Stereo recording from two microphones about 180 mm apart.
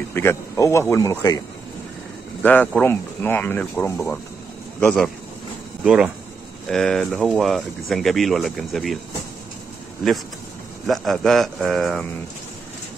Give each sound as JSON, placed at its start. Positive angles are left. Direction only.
{"t": 0.1, "sound": "speech", "side_deg": 15}
{"t": 2.4, "sound": "speech", "side_deg": 10}
{"t": 5.9, "sound": "speech", "side_deg": -5}
{"t": 10.9, "sound": "speech", "side_deg": 0}